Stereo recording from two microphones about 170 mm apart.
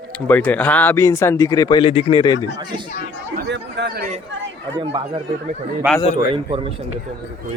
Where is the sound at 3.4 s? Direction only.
85° right.